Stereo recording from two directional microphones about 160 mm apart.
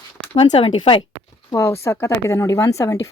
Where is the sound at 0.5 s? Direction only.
35° left (ahead or behind).